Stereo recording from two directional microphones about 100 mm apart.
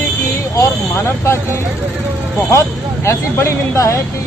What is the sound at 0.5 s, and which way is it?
Speech, 30° left (ahead or behind).